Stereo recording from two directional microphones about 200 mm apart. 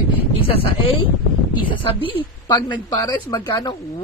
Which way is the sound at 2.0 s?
25° left (ahead or behind).